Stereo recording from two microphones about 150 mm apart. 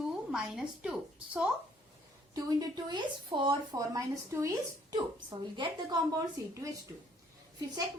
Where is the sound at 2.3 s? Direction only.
25° right (ahead or behind).